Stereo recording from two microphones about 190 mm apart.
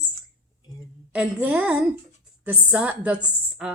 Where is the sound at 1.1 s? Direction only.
5° right (ahead or behind).